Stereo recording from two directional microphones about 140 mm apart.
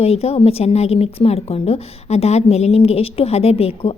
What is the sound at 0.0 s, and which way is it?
A woman's voice, 45° left (ahead or behind).